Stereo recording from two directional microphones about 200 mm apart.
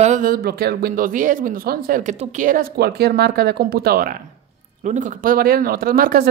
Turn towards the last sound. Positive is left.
turn(degrees=-45)  # may be behind; listen again after turning